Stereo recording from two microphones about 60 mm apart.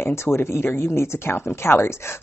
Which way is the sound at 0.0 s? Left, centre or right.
Left.